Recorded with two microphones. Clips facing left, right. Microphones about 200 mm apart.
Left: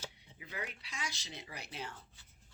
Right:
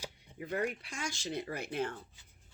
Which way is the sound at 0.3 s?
50° right (ahead or behind).